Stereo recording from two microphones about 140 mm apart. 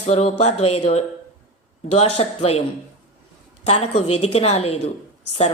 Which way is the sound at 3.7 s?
45° left (ahead or behind).